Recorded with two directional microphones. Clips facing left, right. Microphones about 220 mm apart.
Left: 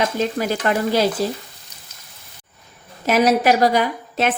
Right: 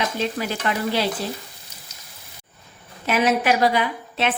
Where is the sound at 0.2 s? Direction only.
45° left (ahead or behind).